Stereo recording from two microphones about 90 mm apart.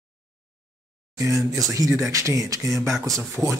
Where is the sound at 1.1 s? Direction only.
35° right (ahead or behind).